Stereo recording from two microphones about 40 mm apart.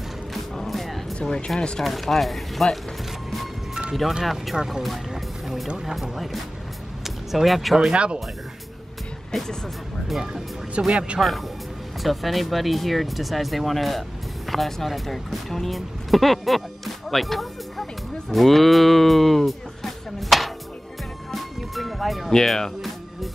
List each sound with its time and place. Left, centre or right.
0.6 s music: centre
1.1 s speech: centre
1.8 s speech: centre
4.2 s speech: centre
5.1 s music: centre
5.9 s speech: centre
7.9 s speech: right
9.3 s speech: centre
10.0 s speech: centre
10.9 s speech: right
11.1 s speech: centre
21.3 s music: centre
22.3 s speech: centre